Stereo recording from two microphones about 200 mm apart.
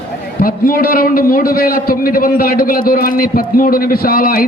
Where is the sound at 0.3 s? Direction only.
45° left (ahead or behind).